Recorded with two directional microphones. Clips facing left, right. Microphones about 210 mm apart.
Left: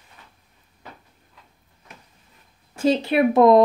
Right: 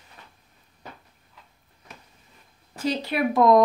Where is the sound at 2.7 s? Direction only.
25° left (ahead or behind).